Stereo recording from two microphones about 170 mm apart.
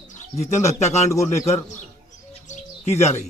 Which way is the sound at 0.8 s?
40° left (ahead or behind).